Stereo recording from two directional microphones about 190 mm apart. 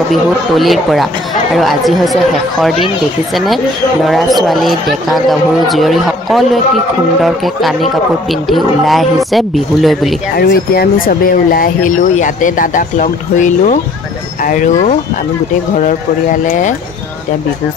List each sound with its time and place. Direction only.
0.1 s speech: centre (ahead or behind)
4.0 s speech: centre (ahead or behind)
10.3 s speech: 55° left (ahead or behind)
16.4 s speech: 45° left (ahead or behind)